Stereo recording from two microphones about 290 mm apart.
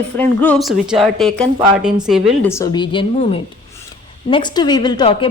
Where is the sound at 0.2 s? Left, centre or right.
Centre.